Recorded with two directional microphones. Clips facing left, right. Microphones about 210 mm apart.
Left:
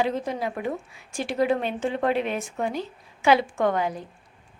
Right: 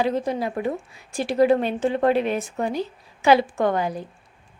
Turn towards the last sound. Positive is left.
turn(degrees=-35)  # may be behind; listen again after turning